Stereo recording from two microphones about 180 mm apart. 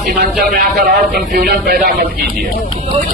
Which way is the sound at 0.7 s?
45° right (ahead or behind).